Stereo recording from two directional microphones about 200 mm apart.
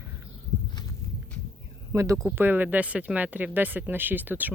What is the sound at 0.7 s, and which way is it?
Walk, 20° left (ahead or behind).